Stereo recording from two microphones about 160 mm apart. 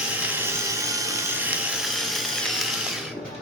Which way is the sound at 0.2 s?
15° right (ahead or behind).